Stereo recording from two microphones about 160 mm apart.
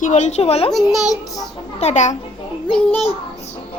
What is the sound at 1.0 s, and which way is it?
Child singing, 20° left (ahead or behind).